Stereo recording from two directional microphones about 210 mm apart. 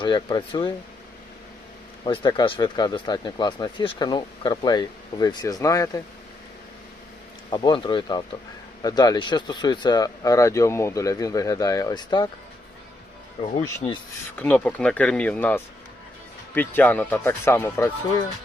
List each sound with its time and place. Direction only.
0.0 s speech: 20° left (ahead or behind)
2.0 s speech: 20° left (ahead or behind)
7.5 s speech: 20° left (ahead or behind)
13.6 s speech: 20° left (ahead or behind)
14.3 s speech: 10° left (ahead or behind)